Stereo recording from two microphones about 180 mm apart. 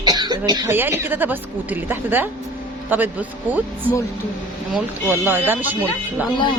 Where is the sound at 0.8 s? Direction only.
10° right (ahead or behind).